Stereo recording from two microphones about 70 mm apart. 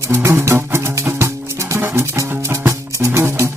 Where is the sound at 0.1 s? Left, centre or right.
Right.